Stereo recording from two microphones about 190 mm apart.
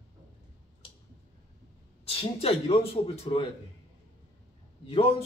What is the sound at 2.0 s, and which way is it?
A man's voice, 30° left (ahead or behind).